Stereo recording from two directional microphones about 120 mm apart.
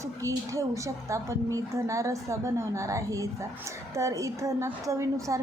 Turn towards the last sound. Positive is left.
turn(degrees=-25)  # may be behind; listen again after turning